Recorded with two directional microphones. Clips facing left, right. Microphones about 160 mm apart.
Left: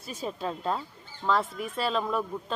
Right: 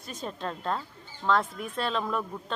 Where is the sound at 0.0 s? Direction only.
5° left (ahead or behind).